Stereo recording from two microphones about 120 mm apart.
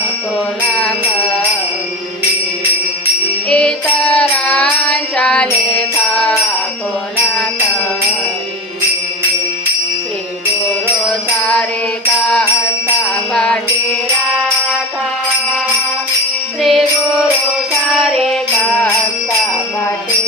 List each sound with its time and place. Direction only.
3.5 s music: 10° left (ahead or behind)
6.1 s jingle bell: 5° left (ahead or behind)
11.0 s music: 5° left (ahead or behind)
13.3 s music: 5° left (ahead or behind)
16.6 s music: centre (ahead or behind)
17.9 s music: centre (ahead or behind)